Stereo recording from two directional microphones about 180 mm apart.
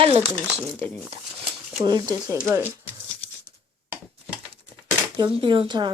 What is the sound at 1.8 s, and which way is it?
Speech, 25° right (ahead or behind).